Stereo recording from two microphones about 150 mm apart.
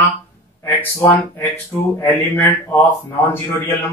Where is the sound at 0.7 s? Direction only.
15° left (ahead or behind).